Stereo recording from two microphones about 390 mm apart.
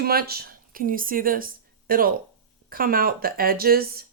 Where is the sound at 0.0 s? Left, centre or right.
Right.